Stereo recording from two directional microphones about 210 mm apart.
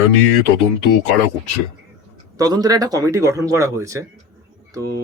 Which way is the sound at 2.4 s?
20° right (ahead or behind).